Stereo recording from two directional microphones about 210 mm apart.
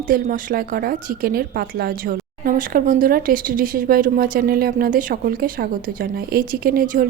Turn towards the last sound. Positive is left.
turn(degrees=-40)  # may be behind; listen again after turning